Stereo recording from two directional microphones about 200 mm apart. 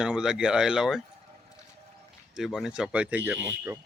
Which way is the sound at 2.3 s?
Centre (ahead or behind).